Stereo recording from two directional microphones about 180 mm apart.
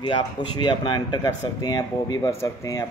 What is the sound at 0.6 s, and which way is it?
Speech, 25° left (ahead or behind).